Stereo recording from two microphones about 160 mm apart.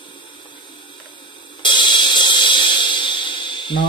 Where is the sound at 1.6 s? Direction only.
30° left (ahead or behind).